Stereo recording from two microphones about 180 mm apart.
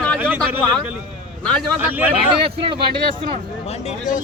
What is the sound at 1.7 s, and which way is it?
Speech, 10° right (ahead or behind).